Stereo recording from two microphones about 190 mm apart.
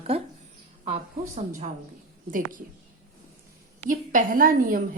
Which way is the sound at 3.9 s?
45° right (ahead or behind).